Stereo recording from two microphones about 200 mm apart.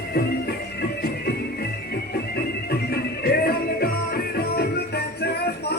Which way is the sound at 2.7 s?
50° left (ahead or behind).